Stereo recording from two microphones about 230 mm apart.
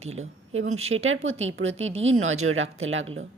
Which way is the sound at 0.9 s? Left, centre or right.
Right.